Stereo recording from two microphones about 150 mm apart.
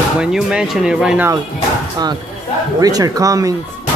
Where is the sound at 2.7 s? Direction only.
25° right (ahead or behind).